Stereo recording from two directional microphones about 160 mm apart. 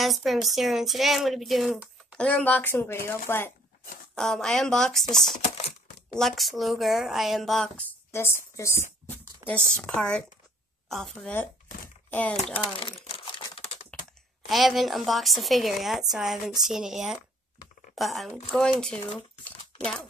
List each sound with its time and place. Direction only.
0.0 s speech: centre (ahead or behind)
2.1 s a woman's voice: 5° left (ahead or behind)
4.1 s speech: 5° left (ahead or behind)
5.4 s typing: 45° left (ahead or behind)
6.1 s speech: centre (ahead or behind)
12.7 s crumpling: 35° left (ahead or behind)
13.9 s typing: 5° left (ahead or behind)
14.5 s speech: centre (ahead or behind)
19.1 s a sound: 5° left (ahead or behind)